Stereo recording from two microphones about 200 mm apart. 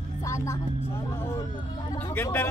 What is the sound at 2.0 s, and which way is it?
Speech, 10° left (ahead or behind).